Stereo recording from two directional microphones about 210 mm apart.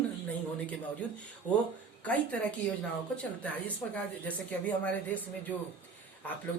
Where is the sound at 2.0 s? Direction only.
5° left (ahead or behind).